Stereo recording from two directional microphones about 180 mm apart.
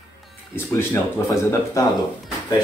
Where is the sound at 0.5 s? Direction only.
15° left (ahead or behind).